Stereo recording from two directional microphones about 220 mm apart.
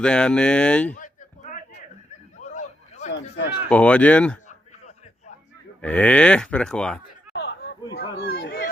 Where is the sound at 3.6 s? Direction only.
5° left (ahead or behind).